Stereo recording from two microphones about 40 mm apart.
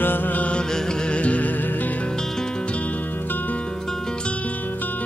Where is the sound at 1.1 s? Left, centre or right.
Left.